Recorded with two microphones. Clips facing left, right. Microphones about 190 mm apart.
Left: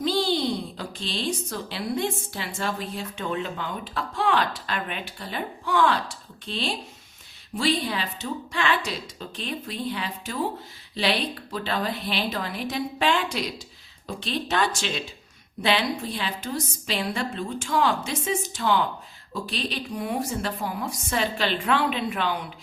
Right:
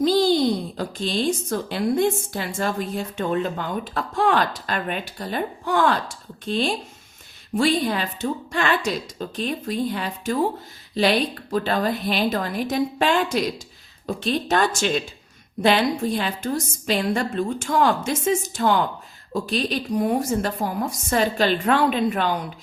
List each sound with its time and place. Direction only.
0.0 s speech: 40° right (ahead or behind)